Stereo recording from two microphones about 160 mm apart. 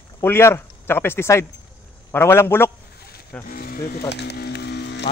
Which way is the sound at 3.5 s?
70° left (ahead or behind).